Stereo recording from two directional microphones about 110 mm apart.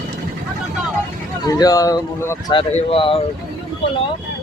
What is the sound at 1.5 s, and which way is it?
Speech, 35° left (ahead or behind).